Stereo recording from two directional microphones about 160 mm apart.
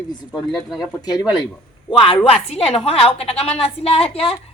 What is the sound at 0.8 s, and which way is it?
A woman's voice, 25° left (ahead or behind).